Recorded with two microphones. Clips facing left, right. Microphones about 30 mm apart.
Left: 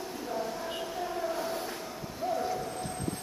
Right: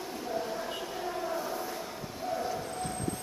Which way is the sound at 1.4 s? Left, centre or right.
Left.